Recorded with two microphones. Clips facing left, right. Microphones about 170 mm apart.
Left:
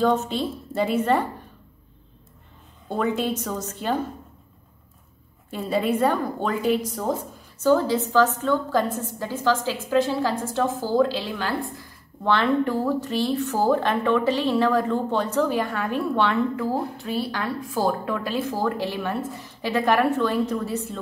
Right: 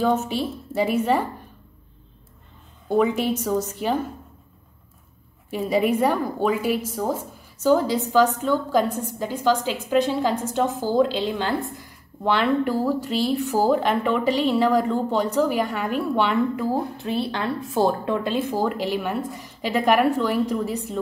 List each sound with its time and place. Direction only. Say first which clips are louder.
0.0 s a woman's voice: even; 10° right (ahead or behind)
2.9 s a woman's voice: right 4 dB; 10° right (ahead or behind)
5.5 s a woman's voice: right 2 dB; 10° right (ahead or behind)
12.2 s a woman's voice: even; 10° right (ahead or behind)